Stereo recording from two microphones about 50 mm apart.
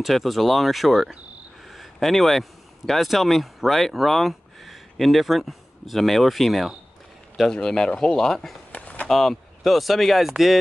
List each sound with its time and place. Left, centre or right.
0.0 s speech: centre
1.7 s a sound: centre
2.9 s speech: centre
7.5 s speech: centre
8.7 s a sound: left
9.1 s speech: centre